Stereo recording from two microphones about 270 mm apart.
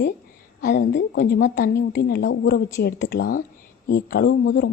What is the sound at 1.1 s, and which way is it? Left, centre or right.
Speech, left.